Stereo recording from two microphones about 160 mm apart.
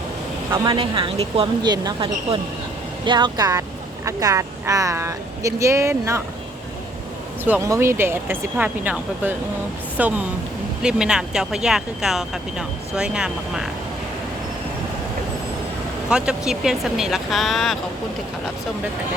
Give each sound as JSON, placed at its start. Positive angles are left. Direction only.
{"t": 0.5, "sound": "speech", "side_deg": -25}
{"t": 7.4, "sound": "speech", "side_deg": -15}
{"t": 16.0, "sound": "speech", "side_deg": -5}